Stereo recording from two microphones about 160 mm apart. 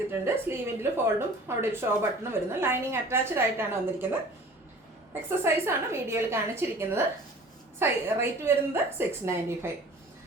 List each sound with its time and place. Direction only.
0.1 s speech: 15° right (ahead or behind)
5.4 s speech: 15° right (ahead or behind)